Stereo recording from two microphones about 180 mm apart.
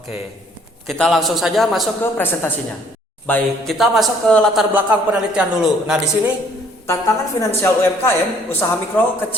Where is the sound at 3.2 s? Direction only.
5° left (ahead or behind).